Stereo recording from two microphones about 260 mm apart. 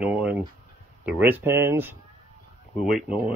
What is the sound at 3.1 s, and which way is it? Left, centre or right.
Speech, left.